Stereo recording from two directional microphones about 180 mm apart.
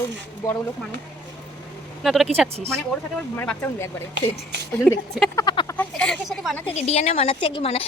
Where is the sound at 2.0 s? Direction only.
Centre (ahead or behind).